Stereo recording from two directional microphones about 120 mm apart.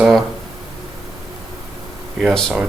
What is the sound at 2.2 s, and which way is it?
Speech, 5° left (ahead or behind).